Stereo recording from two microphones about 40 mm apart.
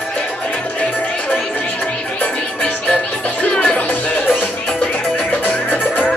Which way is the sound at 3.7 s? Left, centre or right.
Left.